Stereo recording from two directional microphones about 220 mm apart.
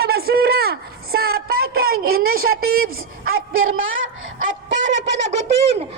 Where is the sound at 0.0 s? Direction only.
45° right (ahead or behind).